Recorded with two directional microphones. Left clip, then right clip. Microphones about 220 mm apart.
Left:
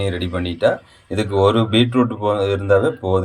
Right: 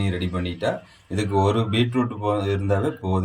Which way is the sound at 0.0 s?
5° left (ahead or behind).